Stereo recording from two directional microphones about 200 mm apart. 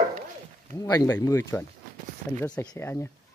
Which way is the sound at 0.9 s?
15° left (ahead or behind).